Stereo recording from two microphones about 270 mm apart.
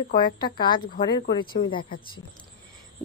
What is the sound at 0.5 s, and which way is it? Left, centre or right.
Speech, centre.